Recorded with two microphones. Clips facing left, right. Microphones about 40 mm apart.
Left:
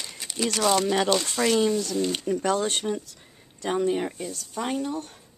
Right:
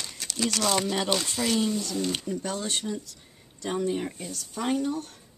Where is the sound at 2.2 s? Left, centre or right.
Left.